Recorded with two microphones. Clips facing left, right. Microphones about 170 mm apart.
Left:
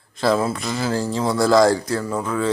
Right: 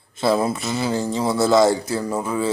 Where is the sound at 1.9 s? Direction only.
10° right (ahead or behind).